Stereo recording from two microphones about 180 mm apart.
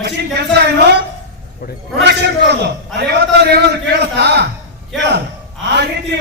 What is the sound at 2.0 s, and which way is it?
Speech, 70° right (ahead or behind).